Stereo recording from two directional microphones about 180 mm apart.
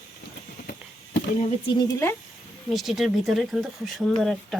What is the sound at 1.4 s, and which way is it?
Speech, 40° left (ahead or behind).